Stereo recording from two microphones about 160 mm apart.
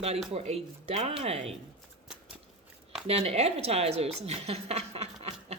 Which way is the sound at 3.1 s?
40° right (ahead or behind).